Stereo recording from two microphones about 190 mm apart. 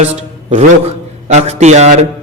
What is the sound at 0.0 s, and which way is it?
A man's voice, 35° right (ahead or behind).